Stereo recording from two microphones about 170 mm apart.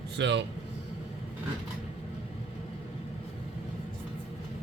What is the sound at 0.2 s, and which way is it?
Speech, 90° right.